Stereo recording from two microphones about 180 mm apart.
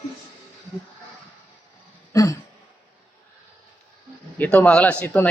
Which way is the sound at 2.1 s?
15° left (ahead or behind).